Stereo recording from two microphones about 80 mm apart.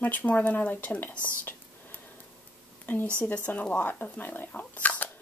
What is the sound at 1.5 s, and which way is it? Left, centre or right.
Whispering, left.